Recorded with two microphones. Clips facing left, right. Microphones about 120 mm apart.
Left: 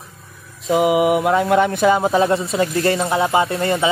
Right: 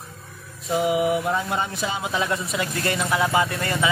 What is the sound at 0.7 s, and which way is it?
Speech, 90° left.